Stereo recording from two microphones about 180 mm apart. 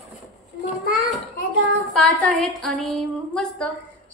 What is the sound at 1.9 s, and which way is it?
Speech, 5° left (ahead or behind).